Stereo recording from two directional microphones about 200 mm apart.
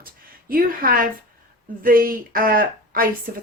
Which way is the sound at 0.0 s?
45° right (ahead or behind).